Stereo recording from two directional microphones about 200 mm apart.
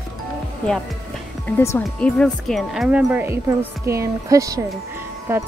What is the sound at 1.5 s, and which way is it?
Speech, 10° left (ahead or behind).